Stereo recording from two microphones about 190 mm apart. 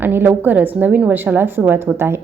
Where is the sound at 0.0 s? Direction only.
10° right (ahead or behind).